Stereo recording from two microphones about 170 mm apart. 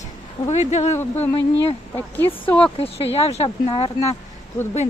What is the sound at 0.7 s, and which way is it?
Speech, 40° left (ahead or behind).